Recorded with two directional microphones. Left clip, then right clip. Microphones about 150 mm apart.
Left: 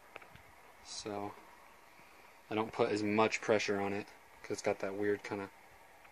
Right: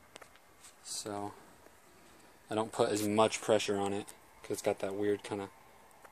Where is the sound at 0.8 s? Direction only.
35° right (ahead or behind).